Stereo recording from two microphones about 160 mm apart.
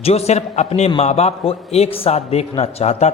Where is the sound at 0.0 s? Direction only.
40° left (ahead or behind).